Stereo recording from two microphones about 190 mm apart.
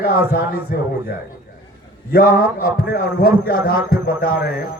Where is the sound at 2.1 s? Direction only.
50° left (ahead or behind).